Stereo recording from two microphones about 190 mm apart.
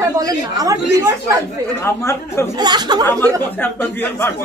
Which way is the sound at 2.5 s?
20° right (ahead or behind).